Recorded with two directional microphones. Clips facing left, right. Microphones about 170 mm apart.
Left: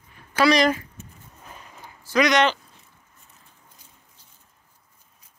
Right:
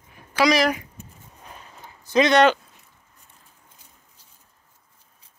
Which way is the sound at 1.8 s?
20° right (ahead or behind).